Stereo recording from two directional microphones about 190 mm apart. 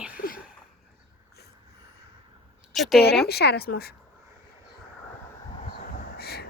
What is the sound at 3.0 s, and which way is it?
Speech, 55° left (ahead or behind).